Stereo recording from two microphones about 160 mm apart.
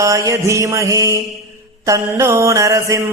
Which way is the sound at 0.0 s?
20° right (ahead or behind).